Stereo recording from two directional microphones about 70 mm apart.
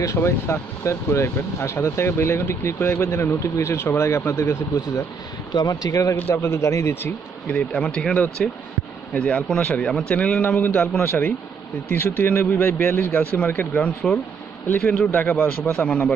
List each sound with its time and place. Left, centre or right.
0.0 s speech: left
5.5 s speech: left
6.1 s speech: left
7.4 s a man's voice: centre
14.8 s speech: centre
15.0 s speech: left